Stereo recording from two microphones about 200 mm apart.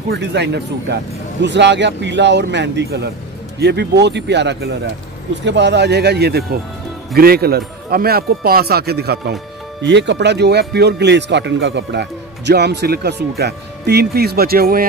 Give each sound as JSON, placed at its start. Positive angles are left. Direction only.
{"t": 0.1, "sound": "a man's voice", "side_deg": -60}